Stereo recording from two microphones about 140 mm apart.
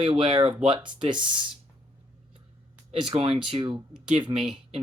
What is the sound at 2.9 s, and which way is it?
Speech, 40° right (ahead or behind).